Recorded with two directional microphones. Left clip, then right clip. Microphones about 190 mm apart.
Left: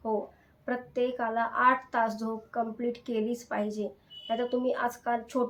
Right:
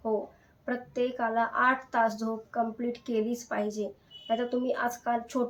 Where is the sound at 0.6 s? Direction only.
Centre (ahead or behind).